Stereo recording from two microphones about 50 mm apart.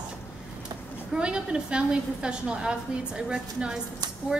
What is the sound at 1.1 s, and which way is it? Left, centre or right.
A woman's voice, centre.